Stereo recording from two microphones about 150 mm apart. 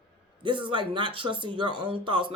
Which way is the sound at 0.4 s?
35° right (ahead or behind).